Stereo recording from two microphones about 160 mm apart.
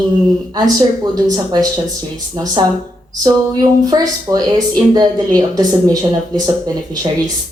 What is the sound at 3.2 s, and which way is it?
Speech, 25° right (ahead or behind).